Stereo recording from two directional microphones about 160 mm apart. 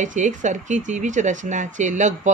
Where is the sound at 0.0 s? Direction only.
50° right (ahead or behind).